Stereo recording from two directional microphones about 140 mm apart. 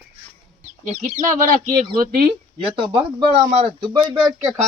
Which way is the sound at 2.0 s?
90° right.